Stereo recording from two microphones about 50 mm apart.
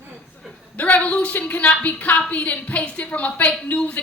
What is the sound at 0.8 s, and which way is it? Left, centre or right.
A woman's voice, left.